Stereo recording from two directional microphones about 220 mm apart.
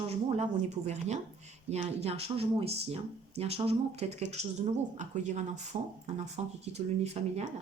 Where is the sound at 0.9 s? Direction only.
30° right (ahead or behind).